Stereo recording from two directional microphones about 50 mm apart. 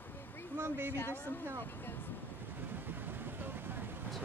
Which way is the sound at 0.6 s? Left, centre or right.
Right.